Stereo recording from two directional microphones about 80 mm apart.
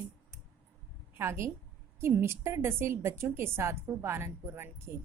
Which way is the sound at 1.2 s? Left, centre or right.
Right.